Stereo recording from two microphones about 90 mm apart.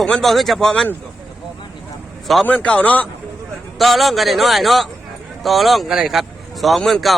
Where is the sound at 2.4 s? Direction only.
15° left (ahead or behind).